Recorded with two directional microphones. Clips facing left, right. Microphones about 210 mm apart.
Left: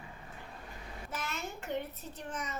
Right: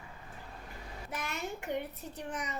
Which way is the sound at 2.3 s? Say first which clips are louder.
Right 1 dB; 15° right (ahead or behind).